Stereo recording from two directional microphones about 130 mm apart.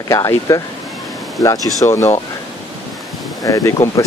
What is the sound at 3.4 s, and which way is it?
Speech, 25° left (ahead or behind).